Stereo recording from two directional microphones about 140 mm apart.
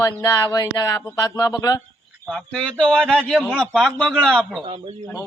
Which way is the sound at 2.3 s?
5° left (ahead or behind).